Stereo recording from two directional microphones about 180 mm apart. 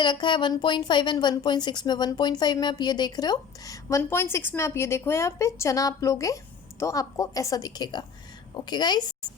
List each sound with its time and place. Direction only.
0.0 s speech: 25° left (ahead or behind)